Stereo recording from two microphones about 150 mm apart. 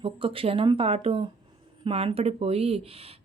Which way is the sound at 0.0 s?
35° right (ahead or behind).